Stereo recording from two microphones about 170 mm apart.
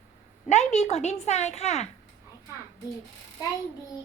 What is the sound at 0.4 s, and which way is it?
A woman's voice, 40° left (ahead or behind).